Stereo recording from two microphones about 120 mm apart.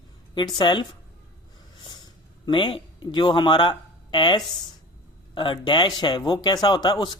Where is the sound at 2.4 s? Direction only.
40° left (ahead or behind).